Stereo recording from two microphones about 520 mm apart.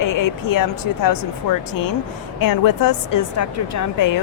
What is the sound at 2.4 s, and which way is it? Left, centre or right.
A woman's voice, left.